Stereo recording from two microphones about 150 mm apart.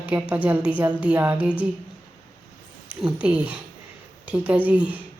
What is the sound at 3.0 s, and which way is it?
A woman's voice, 10° right (ahead or behind).